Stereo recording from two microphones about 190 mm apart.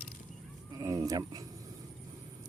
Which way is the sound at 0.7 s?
20° right (ahead or behind).